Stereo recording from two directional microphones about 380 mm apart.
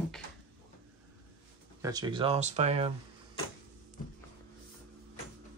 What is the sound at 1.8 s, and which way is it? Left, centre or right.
Speech, centre.